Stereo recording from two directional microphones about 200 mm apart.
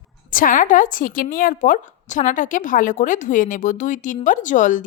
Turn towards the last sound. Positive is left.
turn(degrees=40)  # may be behind; listen again after turning